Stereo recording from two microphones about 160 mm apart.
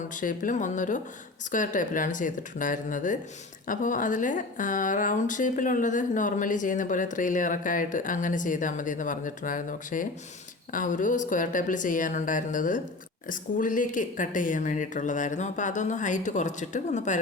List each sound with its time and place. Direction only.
0.1 s a woman's voice: 55° left (ahead or behind)